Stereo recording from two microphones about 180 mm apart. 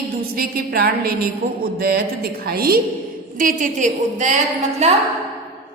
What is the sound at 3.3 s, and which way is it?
A woman's voice, 45° right (ahead or behind).